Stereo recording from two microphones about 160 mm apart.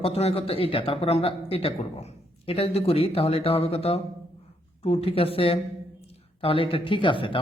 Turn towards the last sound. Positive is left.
turn(degrees=30)  # may be behind; listen again after turning